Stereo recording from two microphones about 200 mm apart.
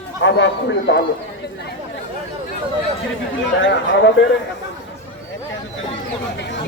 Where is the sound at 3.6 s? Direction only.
60° left (ahead or behind).